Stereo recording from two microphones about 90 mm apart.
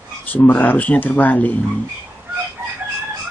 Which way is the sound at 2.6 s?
30° right (ahead or behind).